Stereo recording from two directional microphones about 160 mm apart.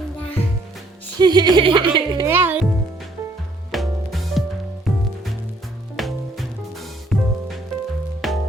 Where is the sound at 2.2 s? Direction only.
10° right (ahead or behind).